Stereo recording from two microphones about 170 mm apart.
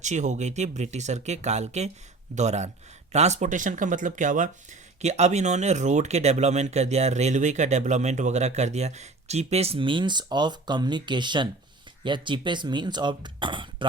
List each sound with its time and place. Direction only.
0.0 s speech: 45° right (ahead or behind); by 13.8 s 30° right (ahead or behind)